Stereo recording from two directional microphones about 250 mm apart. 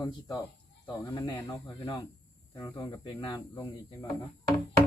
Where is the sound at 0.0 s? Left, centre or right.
Centre.